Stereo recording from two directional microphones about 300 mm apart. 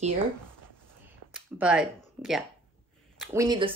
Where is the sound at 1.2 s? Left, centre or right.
Right.